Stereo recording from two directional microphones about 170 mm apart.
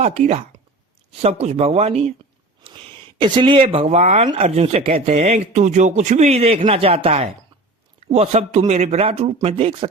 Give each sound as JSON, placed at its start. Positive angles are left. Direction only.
{"t": 0.0, "sound": "speech", "side_deg": -40}
{"t": 3.2, "sound": "speech", "side_deg": -30}